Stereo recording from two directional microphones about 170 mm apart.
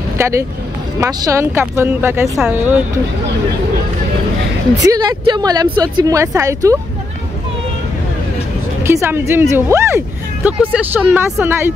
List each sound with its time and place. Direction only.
0.2 s speech: 15° right (ahead or behind)
4.8 s speech: 25° right (ahead or behind)
8.8 s speech: 15° right (ahead or behind)